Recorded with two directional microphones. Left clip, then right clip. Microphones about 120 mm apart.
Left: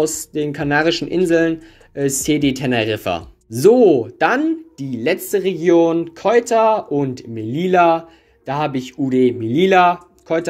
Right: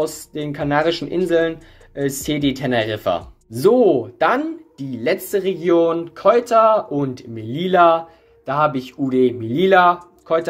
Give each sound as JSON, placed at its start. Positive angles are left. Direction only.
{"t": 0.0, "sound": "speech", "side_deg": 35}